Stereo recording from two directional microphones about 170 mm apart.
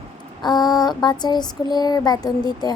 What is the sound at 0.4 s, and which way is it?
Speech, 25° left (ahead or behind).